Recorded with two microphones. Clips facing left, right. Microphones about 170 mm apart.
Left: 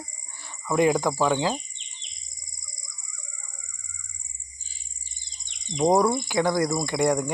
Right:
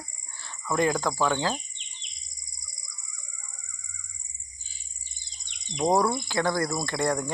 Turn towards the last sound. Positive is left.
turn(degrees=15)  # may be behind; listen again after turning